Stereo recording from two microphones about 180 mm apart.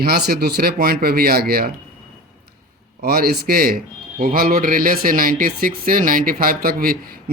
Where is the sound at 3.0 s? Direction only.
60° right (ahead or behind).